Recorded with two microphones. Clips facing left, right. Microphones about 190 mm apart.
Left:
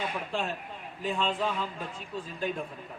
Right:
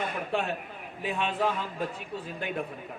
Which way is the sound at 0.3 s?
65° right (ahead or behind).